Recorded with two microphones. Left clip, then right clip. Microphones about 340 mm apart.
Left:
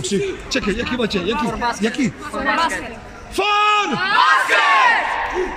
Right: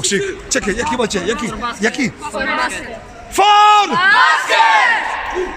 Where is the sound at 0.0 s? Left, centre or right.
Right.